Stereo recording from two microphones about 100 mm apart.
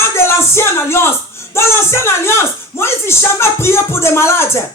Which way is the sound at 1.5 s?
25° left (ahead or behind).